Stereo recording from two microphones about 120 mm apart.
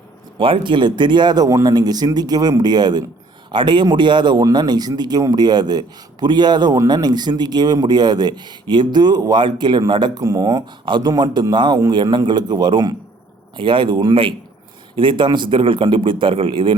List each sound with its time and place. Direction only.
0.3 s a man's voice: 45° right (ahead or behind)